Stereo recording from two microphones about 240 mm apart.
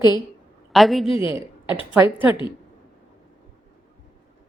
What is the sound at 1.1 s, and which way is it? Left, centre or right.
Speech, left.